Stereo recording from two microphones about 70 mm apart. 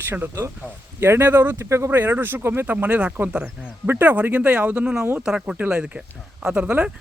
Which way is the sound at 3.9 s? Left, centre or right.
Right.